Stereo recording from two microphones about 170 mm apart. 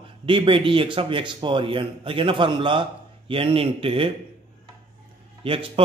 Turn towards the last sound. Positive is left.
turn(degrees=-30)  # may be behind; listen again after turning